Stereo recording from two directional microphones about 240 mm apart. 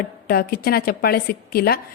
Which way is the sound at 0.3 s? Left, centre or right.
Left.